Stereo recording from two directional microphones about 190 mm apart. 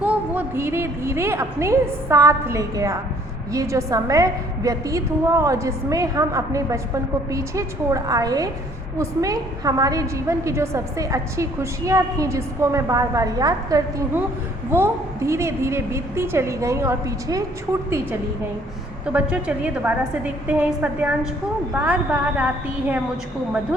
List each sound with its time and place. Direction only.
0.0 s a woman's voice: 10° right (ahead or behind)
19.0 s a woman's voice: 5° right (ahead or behind)